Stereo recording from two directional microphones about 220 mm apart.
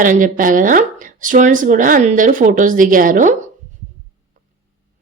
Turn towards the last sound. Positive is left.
turn(degrees=-35)  # may be behind; listen again after turning